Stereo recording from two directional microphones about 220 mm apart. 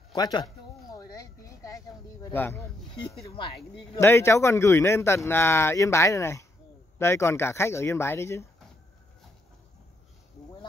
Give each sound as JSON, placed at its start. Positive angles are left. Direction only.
{"t": 0.1, "sound": "a sound", "side_deg": 20}
{"t": 2.3, "sound": "speech", "side_deg": 10}
{"t": 3.9, "sound": "speech", "side_deg": 10}